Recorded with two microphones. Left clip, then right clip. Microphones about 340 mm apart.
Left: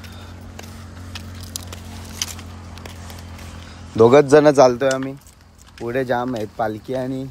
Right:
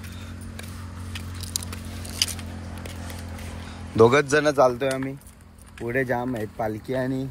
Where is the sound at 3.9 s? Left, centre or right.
Centre.